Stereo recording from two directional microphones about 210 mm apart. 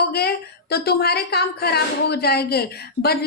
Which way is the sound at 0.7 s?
50° left (ahead or behind).